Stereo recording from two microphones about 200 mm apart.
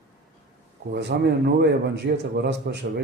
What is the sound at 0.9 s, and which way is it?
A man's voice, 55° right (ahead or behind).